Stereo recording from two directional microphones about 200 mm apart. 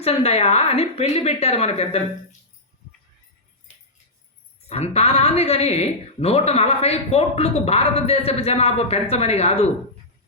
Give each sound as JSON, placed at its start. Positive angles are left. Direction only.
{"t": 0.0, "sound": "a woman's voice", "side_deg": 30}
{"t": 4.7, "sound": "a woman's voice", "side_deg": 30}